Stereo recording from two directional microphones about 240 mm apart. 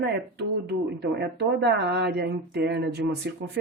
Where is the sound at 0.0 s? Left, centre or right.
Right.